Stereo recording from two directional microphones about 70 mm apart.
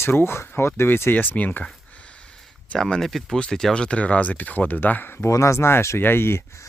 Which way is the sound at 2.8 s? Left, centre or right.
Centre.